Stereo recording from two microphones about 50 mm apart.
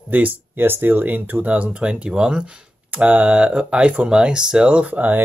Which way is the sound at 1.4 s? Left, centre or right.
Right.